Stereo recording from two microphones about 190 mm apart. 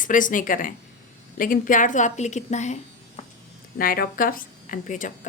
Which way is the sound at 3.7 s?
50° left (ahead or behind).